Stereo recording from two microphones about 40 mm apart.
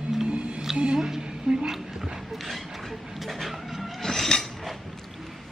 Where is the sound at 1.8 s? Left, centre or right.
Centre.